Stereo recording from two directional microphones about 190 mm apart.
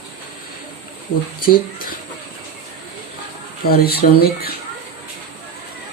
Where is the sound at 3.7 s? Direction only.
55° left (ahead or behind).